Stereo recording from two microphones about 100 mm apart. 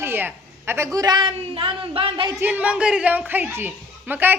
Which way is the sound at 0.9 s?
45° right (ahead or behind).